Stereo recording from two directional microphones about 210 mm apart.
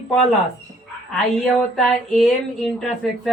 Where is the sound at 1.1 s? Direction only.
Centre (ahead or behind).